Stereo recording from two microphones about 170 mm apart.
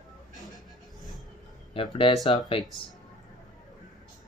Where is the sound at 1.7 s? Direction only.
30° left (ahead or behind).